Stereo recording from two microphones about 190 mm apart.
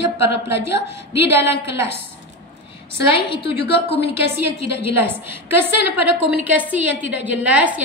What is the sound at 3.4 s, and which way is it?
Speech, 60° left (ahead or behind).